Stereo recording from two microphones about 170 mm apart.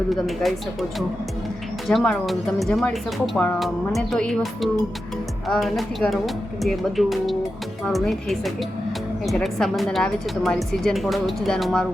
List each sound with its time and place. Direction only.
0.1 s speech: centre (ahead or behind)